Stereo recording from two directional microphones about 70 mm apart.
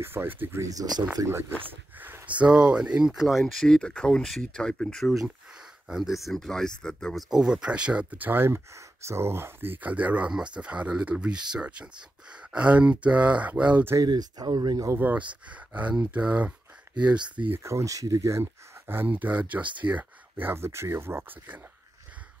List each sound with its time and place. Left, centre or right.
0.0 s speech: right
0.6 s speech: right
1.7 s speech: right; by 3.6 s centre
3.6 s speech: centre
7.2 s speech: centre
14.0 s speech: right
15.0 s speech: right
17.0 s speech: right
17.6 s speech: right
18.4 s speech: right